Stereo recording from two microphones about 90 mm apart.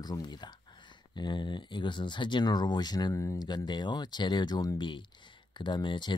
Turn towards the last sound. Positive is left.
turn(degrees=60)  # may be behind; listen again after turning